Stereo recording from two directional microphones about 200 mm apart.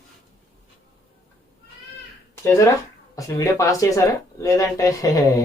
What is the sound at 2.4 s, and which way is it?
Speech, 15° left (ahead or behind).